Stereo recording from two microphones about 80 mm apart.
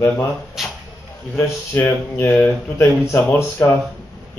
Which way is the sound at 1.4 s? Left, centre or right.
Left.